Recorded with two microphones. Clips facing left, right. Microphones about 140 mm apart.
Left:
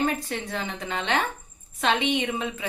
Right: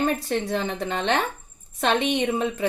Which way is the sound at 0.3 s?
40° right (ahead or behind).